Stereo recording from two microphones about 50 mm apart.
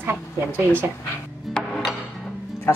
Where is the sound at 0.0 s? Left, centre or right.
Right.